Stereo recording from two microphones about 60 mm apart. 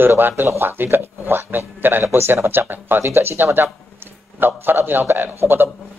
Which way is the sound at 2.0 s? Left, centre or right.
Right.